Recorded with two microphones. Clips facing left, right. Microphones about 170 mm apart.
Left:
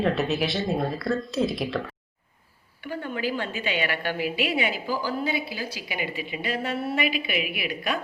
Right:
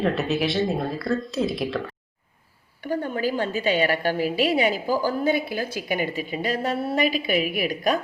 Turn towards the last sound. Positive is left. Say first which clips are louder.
# right 6 dB
turn(degrees=-40)  # may be behind; listen again after turning